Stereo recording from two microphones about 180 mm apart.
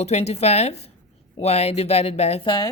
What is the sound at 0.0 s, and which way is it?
A woman's voice, 35° left (ahead or behind).